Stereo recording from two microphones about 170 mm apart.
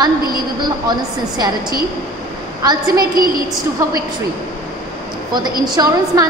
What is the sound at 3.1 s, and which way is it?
Speech, 55° right (ahead or behind).